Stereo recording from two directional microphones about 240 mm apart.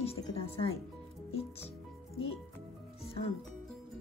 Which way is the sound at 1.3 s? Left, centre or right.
Left.